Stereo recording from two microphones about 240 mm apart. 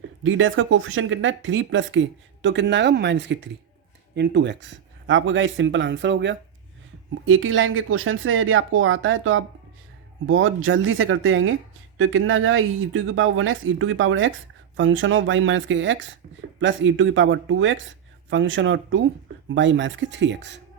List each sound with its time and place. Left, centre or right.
0.2 s speech: right